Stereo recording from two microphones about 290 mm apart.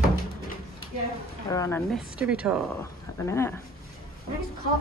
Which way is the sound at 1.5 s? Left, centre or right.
Centre.